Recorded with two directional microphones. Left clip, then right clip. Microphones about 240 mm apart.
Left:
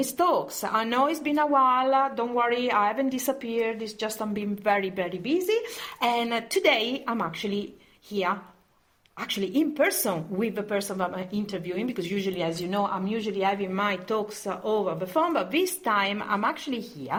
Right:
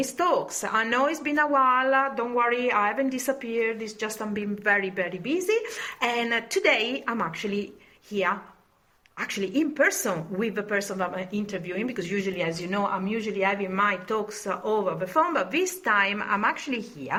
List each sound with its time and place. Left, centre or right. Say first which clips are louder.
0.2 s a woman's voice: left 1 dB; left
9.6 s a woman's voice: right 1 dB; left